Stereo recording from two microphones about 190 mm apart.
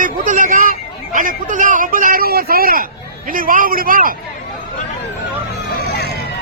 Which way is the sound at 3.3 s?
45° right (ahead or behind).